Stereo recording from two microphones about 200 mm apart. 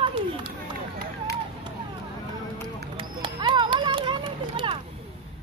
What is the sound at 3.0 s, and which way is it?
Run, 25° right (ahead or behind).